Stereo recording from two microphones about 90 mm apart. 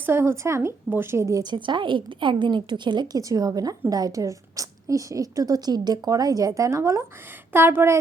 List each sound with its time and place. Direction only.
0.0 s a woman's voice: 25° right (ahead or behind)
1.4 s a woman's voice: 60° right (ahead or behind)
3.2 s a woman's voice: 40° right (ahead or behind)
7.5 s a woman's voice: 25° right (ahead or behind)